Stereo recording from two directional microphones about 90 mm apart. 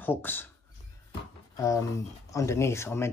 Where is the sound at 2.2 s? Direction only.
35° left (ahead or behind).